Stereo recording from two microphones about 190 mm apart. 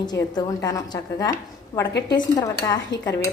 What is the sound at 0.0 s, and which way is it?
A woman's voice, 20° left (ahead or behind).